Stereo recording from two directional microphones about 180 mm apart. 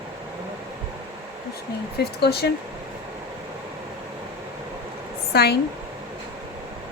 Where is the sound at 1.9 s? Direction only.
60° left (ahead or behind).